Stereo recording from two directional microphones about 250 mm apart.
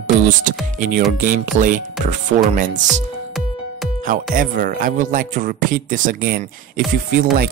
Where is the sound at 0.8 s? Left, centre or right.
Right.